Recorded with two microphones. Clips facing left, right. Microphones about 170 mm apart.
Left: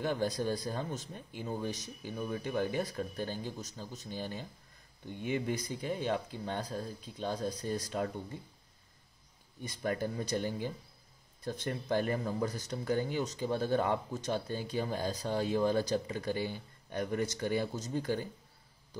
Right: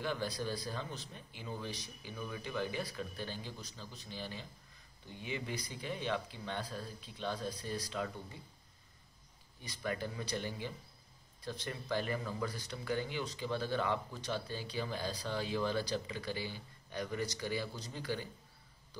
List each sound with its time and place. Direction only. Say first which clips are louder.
0.0 s speech: left 5 dB; 45° left (ahead or behind)
9.8 s speech: left 5 dB; 45° left (ahead or behind)